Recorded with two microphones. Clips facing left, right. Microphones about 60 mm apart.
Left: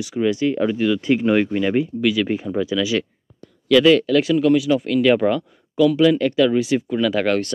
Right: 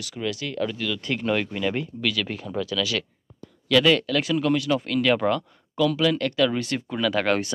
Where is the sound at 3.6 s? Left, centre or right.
Centre.